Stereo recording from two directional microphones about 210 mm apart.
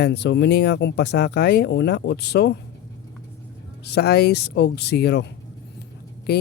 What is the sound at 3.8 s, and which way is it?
Speech, 50° left (ahead or behind).